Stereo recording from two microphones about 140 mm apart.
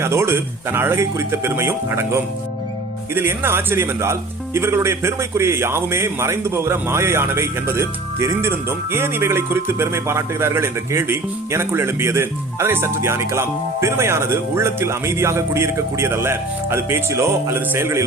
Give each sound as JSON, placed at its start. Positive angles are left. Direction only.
{"t": 0.0, "sound": "speech", "side_deg": -20}
{"t": 3.2, "sound": "speech", "side_deg": -15}